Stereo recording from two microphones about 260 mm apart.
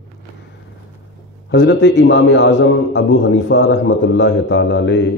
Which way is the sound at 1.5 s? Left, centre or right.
Left.